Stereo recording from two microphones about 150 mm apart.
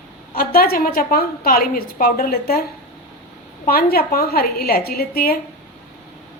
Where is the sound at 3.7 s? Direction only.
85° left.